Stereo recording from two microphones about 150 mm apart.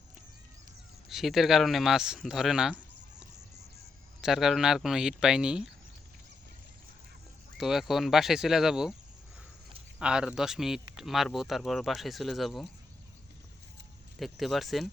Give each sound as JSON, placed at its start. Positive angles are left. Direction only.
{"t": 1.1, "sound": "speech", "side_deg": 0}
{"t": 7.6, "sound": "speech", "side_deg": 0}
{"t": 10.0, "sound": "speech", "side_deg": -5}
{"t": 14.2, "sound": "speech", "side_deg": 0}